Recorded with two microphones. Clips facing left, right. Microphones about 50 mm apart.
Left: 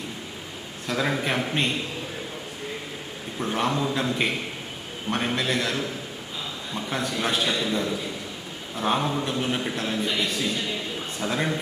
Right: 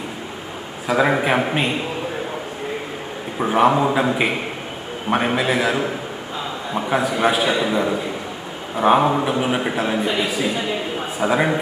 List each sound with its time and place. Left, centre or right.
0.9 s a man's voice: right
3.4 s a man's voice: centre
6.9 s a man's voice: centre
10.2 s a man's voice: centre